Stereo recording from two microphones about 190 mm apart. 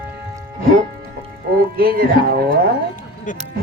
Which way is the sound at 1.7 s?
50° right (ahead or behind).